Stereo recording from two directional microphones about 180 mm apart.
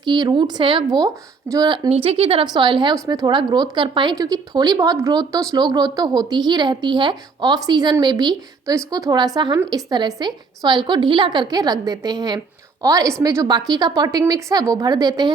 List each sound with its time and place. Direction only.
0.0 s speech: 25° right (ahead or behind)